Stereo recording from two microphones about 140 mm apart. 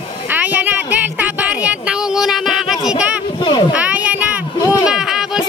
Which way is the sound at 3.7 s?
10° right (ahead or behind).